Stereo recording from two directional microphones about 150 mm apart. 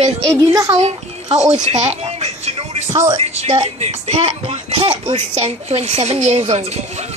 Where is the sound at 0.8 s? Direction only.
50° right (ahead or behind).